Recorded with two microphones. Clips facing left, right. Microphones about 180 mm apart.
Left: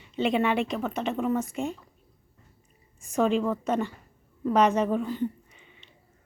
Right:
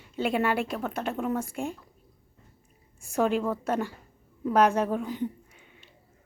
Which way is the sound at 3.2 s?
5° right (ahead or behind).